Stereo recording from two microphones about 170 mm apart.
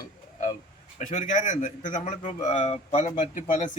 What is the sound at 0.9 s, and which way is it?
A man's voice, 50° left (ahead or behind).